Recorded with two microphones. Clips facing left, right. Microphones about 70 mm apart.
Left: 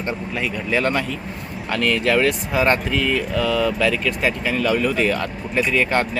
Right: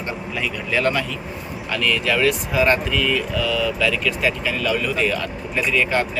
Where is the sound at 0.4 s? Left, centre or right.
Left.